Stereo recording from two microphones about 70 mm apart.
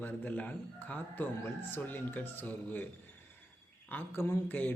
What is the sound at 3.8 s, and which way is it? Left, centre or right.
Speech, left.